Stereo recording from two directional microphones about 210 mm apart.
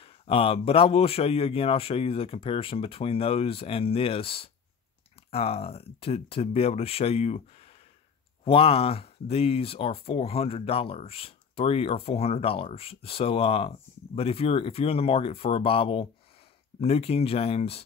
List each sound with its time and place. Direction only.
0.0 s speech: 25° left (ahead or behind)